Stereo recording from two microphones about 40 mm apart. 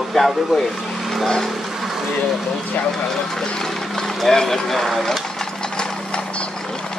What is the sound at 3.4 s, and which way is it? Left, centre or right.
Speech, centre.